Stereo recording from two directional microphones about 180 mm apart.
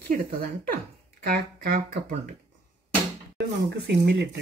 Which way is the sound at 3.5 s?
80° right.